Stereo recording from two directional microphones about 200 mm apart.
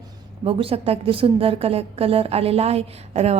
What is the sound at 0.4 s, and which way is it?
A woman's voice, 30° right (ahead or behind).